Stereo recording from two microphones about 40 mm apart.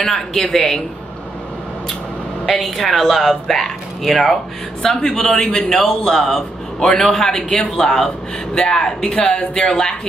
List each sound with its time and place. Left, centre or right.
0.0 s a man's voice: centre
2.4 s a man's voice: centre